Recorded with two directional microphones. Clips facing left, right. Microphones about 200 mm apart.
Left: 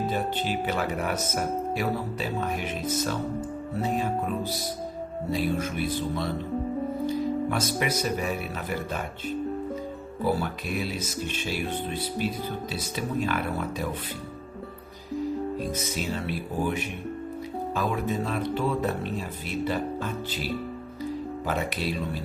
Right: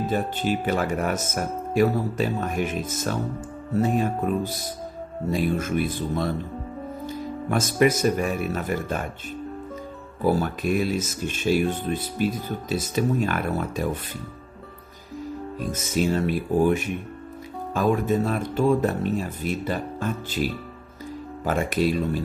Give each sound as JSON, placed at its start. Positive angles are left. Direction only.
{"t": 0.1, "sound": "speech", "side_deg": -50}
{"t": 5.3, "sound": "speech", "side_deg": -50}
{"t": 7.5, "sound": "speech", "side_deg": -50}
{"t": 10.4, "sound": "speech", "side_deg": -50}
{"t": 15.7, "sound": "speech", "side_deg": -45}